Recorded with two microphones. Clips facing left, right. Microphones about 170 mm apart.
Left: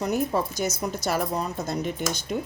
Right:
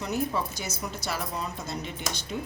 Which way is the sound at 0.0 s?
45° left (ahead or behind).